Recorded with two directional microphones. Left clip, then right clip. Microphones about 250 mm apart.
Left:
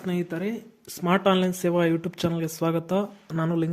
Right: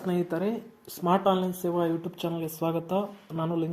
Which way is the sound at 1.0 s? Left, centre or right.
Left.